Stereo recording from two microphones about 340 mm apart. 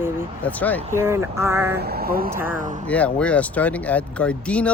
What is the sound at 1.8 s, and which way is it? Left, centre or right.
Speech, right.